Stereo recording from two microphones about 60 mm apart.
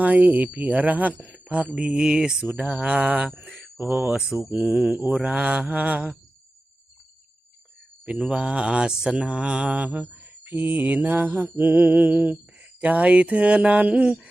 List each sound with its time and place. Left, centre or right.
0.0 s mantra: right; by 2.5 s centre
2.6 s mantra: right
3.8 s speech: right
4.0 s speech: centre
4.9 s mantra: right
8.0 s mantra: centre